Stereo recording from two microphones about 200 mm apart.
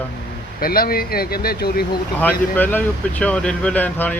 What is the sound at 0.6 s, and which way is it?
Speech, 50° left (ahead or behind).